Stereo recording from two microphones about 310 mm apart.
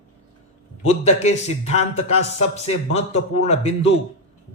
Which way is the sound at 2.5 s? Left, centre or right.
Left.